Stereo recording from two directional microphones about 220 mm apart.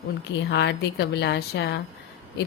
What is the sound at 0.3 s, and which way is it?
A woman's voice, 50° left (ahead or behind).